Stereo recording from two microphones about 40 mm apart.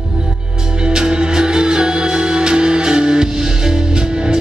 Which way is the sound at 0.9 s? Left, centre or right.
Right.